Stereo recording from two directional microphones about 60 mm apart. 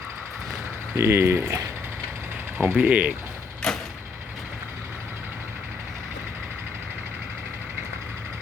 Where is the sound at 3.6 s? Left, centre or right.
Centre.